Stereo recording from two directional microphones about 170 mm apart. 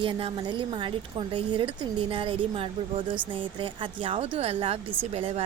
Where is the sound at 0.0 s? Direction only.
30° right (ahead or behind).